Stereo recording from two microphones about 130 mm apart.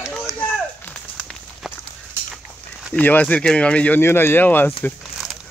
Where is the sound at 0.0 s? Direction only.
5° right (ahead or behind).